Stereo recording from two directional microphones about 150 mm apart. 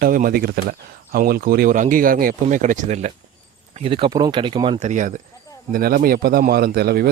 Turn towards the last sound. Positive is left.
turn(degrees=-90)